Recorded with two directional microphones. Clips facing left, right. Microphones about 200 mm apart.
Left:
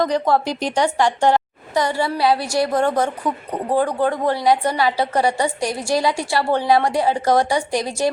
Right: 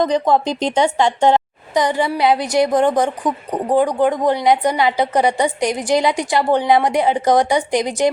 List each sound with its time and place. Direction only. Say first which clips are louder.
0.0 s a woman's voice: right 2 dB; 20° right (ahead or behind)